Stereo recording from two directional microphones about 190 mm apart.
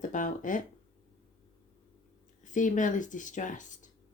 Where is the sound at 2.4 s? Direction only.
40° left (ahead or behind).